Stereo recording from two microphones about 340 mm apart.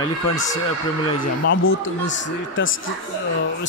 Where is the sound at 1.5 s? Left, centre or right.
Left.